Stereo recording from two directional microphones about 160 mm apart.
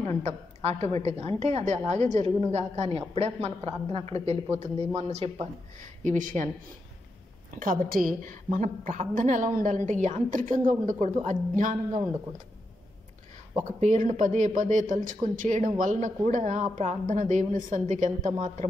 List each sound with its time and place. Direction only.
0.2 s a woman's voice: 40° right (ahead or behind); by 6.5 s 55° right (ahead or behind)
7.5 s a woman's voice: 60° right (ahead or behind)
13.7 s a man's voice: 50° right (ahead or behind)